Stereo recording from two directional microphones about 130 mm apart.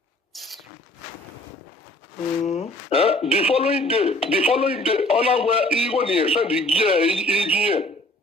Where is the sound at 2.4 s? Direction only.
55° left (ahead or behind).